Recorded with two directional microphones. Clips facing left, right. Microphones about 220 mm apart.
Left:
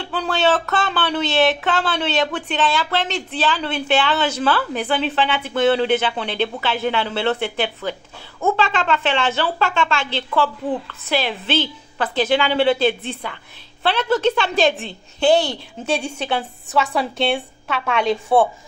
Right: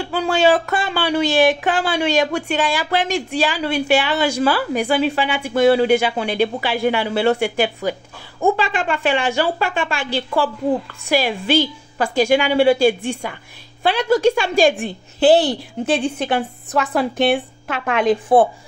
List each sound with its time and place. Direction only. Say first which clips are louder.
0.0 s speech: right 4 dB; 10° right (ahead or behind)
17.8 s speech: right 4 dB; 15° right (ahead or behind)